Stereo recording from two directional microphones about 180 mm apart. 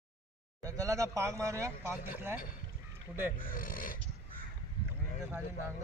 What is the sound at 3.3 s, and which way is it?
Speech, 50° left (ahead or behind).